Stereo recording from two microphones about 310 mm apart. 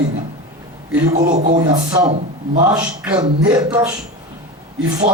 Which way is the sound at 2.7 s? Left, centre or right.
Centre.